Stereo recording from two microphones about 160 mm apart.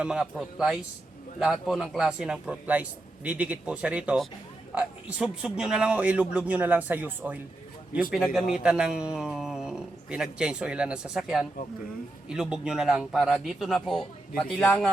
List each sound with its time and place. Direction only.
0.0 s a man's voice: 5° right (ahead or behind)
8.1 s a man's voice: centre (ahead or behind)